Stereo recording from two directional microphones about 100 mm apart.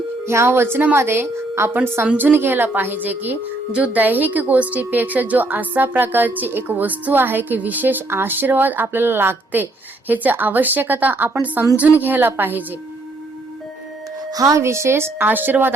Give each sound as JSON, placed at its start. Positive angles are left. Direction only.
{"t": 0.3, "sound": "a woman's voice", "side_deg": -25}
{"t": 14.3, "sound": "a woman's voice", "side_deg": -40}